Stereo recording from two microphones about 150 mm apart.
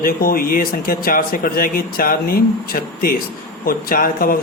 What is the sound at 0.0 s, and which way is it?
Speech, 70° left (ahead or behind).